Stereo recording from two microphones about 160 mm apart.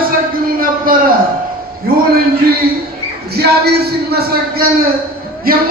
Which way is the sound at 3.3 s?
80° right.